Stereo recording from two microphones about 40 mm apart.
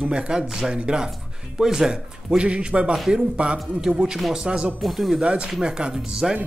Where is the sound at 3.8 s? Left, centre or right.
Centre.